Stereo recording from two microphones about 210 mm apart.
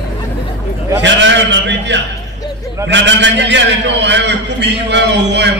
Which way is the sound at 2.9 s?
60° right (ahead or behind).